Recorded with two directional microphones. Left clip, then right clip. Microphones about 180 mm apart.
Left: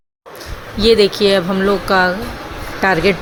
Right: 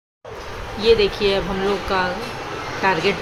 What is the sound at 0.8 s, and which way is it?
A woman's voice, 35° left (ahead or behind).